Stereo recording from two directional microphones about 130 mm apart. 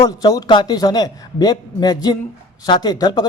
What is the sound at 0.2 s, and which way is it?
A man's voice, 30° left (ahead or behind).